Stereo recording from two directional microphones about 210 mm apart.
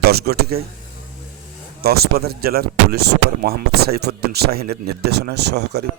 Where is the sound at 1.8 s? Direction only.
45° right (ahead or behind).